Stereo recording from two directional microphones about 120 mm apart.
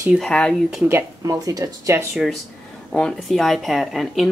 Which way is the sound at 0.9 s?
25° right (ahead or behind).